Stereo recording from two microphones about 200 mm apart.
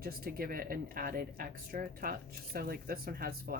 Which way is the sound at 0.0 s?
45° right (ahead or behind).